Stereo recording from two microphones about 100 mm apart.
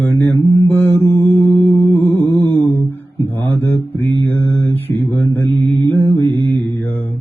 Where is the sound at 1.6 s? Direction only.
20° left (ahead or behind).